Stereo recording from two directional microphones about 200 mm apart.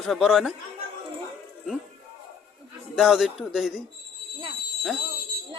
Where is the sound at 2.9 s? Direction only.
Centre (ahead or behind).